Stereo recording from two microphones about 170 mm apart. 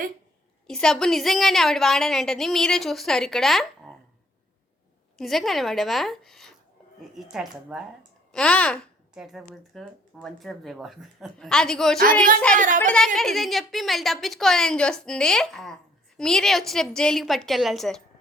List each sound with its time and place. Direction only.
0.7 s a woman's voice: 5° left (ahead or behind)
5.1 s a woman's voice: centre (ahead or behind)
12.5 s speech: 50° right (ahead or behind)
13.1 s a woman's voice: centre (ahead or behind)